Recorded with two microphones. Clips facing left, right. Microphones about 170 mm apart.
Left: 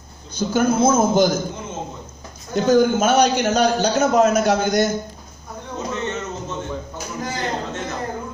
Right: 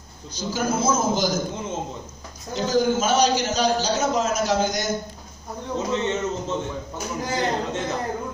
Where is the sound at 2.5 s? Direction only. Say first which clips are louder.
Left 5 dB; 55° left (ahead or behind).